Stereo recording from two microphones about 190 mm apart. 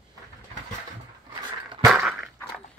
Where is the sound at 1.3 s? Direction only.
25° right (ahead or behind).